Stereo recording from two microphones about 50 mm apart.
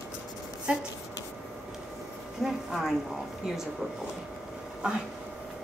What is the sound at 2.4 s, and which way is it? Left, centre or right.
Speech, centre.